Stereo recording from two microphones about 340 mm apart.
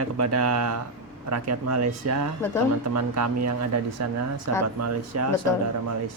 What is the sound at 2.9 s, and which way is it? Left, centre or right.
Speech, right.